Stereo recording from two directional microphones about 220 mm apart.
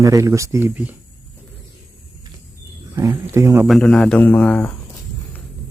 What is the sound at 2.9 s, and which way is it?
Speech, 15° right (ahead or behind).